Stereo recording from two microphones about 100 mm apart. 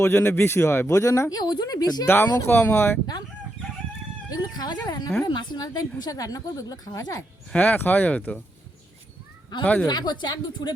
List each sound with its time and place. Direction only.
0.0 s speech: 25° left (ahead or behind)
1.4 s a woman's voice: 45° left (ahead or behind)
2.0 s speech: 20° left (ahead or behind)
4.3 s a woman's voice: 40° left (ahead or behind)
7.5 s speech: 15° left (ahead or behind)
9.8 s speech: 45° left (ahead or behind)